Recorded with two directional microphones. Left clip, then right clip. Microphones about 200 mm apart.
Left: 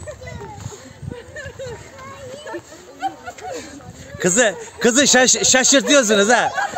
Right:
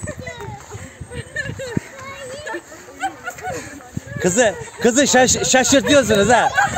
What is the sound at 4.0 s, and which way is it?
A man's voice, 5° right (ahead or behind).